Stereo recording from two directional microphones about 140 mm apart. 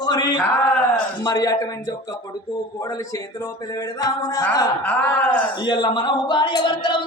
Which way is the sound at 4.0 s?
25° left (ahead or behind).